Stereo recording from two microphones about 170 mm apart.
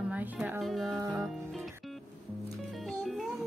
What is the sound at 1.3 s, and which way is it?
Music, centre (ahead or behind).